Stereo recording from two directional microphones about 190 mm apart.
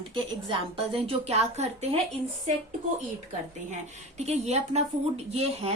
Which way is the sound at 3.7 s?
35° right (ahead or behind).